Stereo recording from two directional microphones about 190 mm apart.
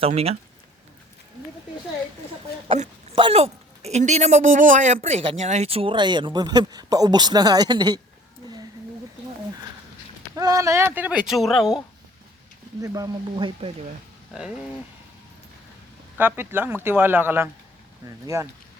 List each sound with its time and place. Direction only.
0.0 s speech: 30° right (ahead or behind)
2.6 s speech: 35° right (ahead or behind)
10.3 s speech: 20° right (ahead or behind); by 11.8 s centre (ahead or behind)
12.8 s speech: 20° right (ahead or behind)
16.1 s speech: 10° right (ahead or behind)